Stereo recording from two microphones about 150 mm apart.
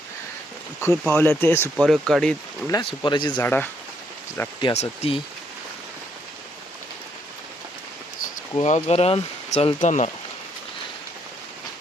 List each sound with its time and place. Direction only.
0.8 s speech: 15° left (ahead or behind)
1.7 s speech: centre (ahead or behind)
2.6 s speech: 25° left (ahead or behind)
3.4 s speech: 15° left (ahead or behind)
4.7 s speech: 45° left (ahead or behind)
8.6 s speech: 45° left (ahead or behind)
9.8 s speech: 55° left (ahead or behind)